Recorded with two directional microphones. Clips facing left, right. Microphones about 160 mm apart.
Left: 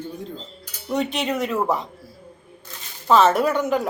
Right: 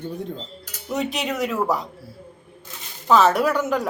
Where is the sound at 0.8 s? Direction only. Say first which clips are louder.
Left 2 dB; centre (ahead or behind).